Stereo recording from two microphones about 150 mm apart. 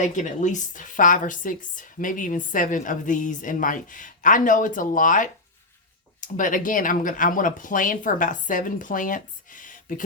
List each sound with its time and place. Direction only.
0.0 s a woman's voice: 55° left (ahead or behind)